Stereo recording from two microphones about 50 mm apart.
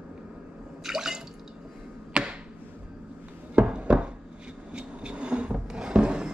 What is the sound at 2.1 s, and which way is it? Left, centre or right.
Arrow, centre.